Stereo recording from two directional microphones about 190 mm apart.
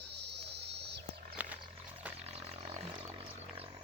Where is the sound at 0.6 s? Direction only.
60° right (ahead or behind).